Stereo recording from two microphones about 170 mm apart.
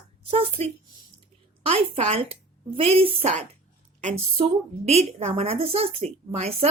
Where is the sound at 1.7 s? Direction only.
35° right (ahead or behind).